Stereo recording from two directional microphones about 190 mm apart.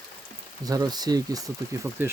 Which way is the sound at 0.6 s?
20° right (ahead or behind).